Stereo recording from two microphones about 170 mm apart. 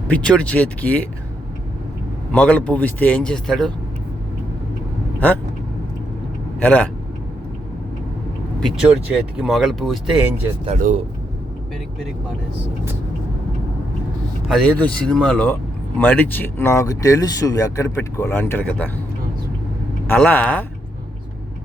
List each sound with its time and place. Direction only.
0.1 s speech: 5° left (ahead or behind)
2.3 s speech: 10° left (ahead or behind)
6.6 s speech: 10° left (ahead or behind)
8.6 s speech: 5° right (ahead or behind)
10.8 s speech: 50° right (ahead or behind)
14.4 s speech: 5° left (ahead or behind)
20.1 s speech: 10° left (ahead or behind)